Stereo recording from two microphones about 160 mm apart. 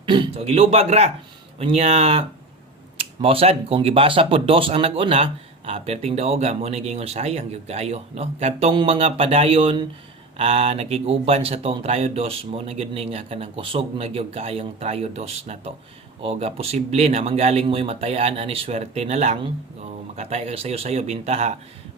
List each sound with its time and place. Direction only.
0.0 s speech: 30° right (ahead or behind)